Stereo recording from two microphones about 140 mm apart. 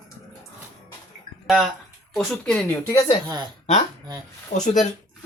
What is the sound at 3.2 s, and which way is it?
Speech, 30° right (ahead or behind).